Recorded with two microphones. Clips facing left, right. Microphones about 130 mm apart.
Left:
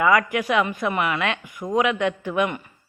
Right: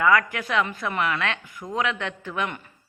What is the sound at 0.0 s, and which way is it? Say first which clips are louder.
Speech: left 2 dB; 15° left (ahead or behind).